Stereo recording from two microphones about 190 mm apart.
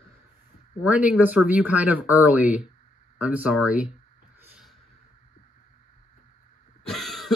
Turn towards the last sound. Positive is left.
turn(degrees=0)  # may be behind; listen again after turning